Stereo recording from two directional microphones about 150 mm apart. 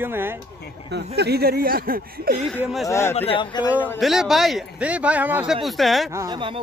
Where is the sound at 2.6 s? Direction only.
Centre (ahead or behind).